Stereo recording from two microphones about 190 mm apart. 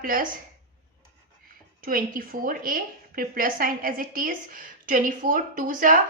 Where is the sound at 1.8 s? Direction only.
50° right (ahead or behind).